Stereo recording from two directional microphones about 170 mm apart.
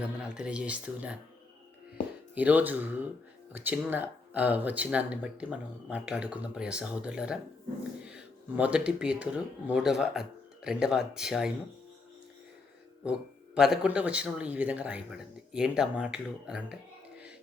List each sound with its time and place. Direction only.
0.0 s speech: 5° right (ahead or behind)
2.3 s speech: 10° right (ahead or behind)
13.1 s speech: 5° right (ahead or behind)